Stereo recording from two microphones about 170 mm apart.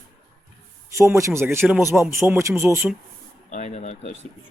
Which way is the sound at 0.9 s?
15° right (ahead or behind).